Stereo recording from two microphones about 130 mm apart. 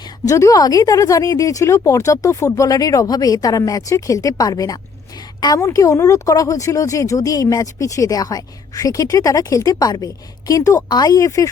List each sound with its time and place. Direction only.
0.3 s speech: 25° left (ahead or behind)